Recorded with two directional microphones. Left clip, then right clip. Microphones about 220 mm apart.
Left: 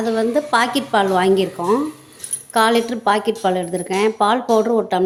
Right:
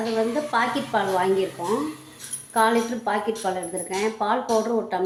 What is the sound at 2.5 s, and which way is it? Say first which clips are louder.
Speech: left 5 dB; 45° left (ahead or behind).